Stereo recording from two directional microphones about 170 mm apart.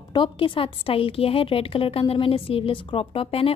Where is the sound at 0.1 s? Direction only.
30° left (ahead or behind).